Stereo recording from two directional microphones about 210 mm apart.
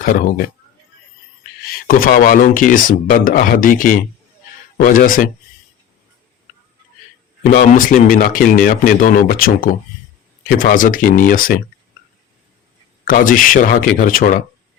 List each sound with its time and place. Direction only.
0.0 s speech: 45° left (ahead or behind)
1.6 s speech: 45° left (ahead or behind)
7.4 s speech: 40° left (ahead or behind)
13.1 s speech: 40° left (ahead or behind)